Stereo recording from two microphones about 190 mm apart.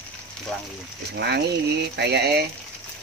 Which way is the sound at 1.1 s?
60° right (ahead or behind).